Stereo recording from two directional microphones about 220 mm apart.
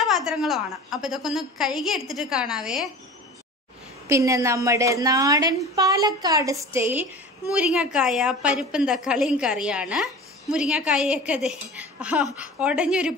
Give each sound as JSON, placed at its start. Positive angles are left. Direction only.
{"t": 0.0, "sound": "a woman's voice", "side_deg": 0}
{"t": 4.1, "sound": "a woman's voice", "side_deg": -15}